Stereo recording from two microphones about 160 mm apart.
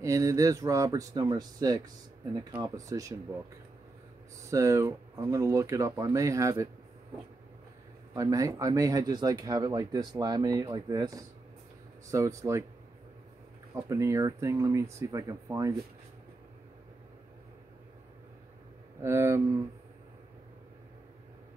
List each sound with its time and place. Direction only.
0.0 s speech: 20° right (ahead or behind)
4.5 s speech: 20° right (ahead or behind)
8.1 s speech: 20° right (ahead or behind)
13.8 s speech: 20° right (ahead or behind)
19.0 s speech: 15° right (ahead or behind)